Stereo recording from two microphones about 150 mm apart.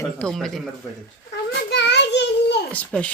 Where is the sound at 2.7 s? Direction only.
10° left (ahead or behind).